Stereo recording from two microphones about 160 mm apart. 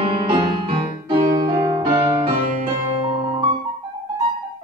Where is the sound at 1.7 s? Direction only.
30° right (ahead or behind).